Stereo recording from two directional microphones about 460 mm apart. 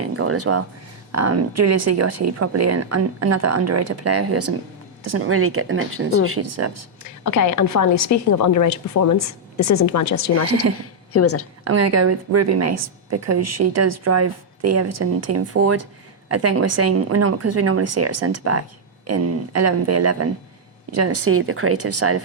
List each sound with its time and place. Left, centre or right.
0.0 s a woman's voice: right
7.3 s a woman's voice: left
11.6 s a woman's voice: right